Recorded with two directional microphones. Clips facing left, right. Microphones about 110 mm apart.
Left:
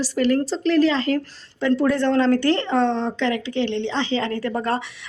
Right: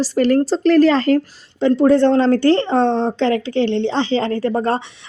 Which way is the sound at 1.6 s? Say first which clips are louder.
Right 7 dB; 25° right (ahead or behind).